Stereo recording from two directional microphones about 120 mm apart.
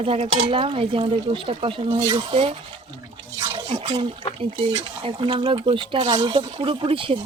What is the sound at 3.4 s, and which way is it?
Drip, 40° right (ahead or behind).